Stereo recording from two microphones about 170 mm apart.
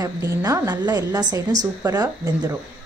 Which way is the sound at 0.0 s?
20° right (ahead or behind).